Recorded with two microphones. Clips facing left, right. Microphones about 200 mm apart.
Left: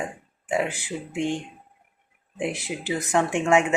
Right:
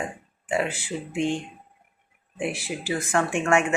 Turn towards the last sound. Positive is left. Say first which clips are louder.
# left 2 dB
turn(degrees=20)  # may be behind; listen again after turning